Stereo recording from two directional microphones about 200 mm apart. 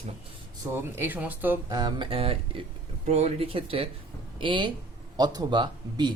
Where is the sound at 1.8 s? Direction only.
25° right (ahead or behind).